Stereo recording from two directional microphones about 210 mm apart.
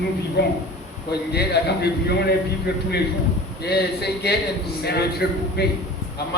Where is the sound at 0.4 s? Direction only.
50° left (ahead or behind).